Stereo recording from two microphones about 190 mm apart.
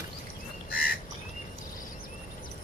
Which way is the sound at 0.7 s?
50° left (ahead or behind).